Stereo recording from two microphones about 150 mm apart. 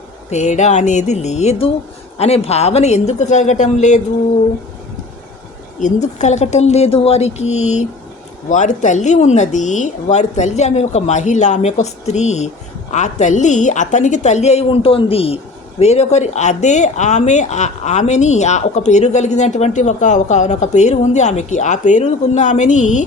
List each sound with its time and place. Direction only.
0.3 s speech: 50° left (ahead or behind)
5.8 s speech: 50° left (ahead or behind)